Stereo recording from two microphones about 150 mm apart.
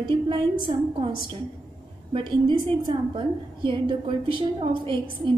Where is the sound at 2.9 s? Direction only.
30° right (ahead or behind).